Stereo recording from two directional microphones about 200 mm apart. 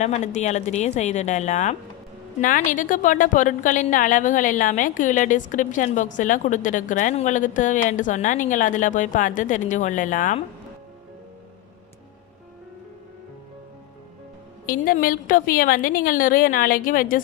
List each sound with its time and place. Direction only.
0.0 s a woman's voice: 35° left (ahead or behind)
14.7 s a woman's voice: 45° left (ahead or behind)